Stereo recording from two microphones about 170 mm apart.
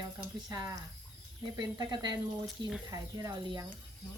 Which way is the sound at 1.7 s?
25° right (ahead or behind).